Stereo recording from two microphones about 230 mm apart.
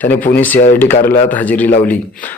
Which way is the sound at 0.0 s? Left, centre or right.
Centre.